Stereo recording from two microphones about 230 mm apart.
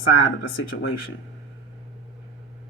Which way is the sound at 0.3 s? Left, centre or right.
Left.